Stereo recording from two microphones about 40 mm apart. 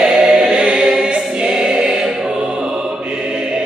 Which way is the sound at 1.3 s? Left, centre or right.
Centre.